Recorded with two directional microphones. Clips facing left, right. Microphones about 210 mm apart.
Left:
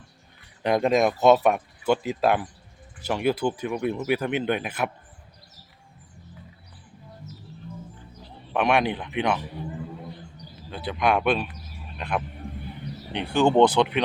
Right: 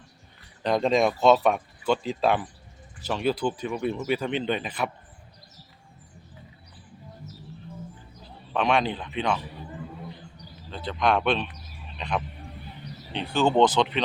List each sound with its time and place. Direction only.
0.6 s speech: 10° left (ahead or behind)
8.5 s speech: 10° left (ahead or behind)
10.7 s speech: 10° left (ahead or behind)